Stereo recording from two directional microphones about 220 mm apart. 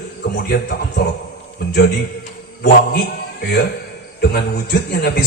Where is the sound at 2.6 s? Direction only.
45° left (ahead or behind).